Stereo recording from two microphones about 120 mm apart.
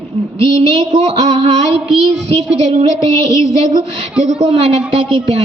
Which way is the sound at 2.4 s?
60° right (ahead or behind).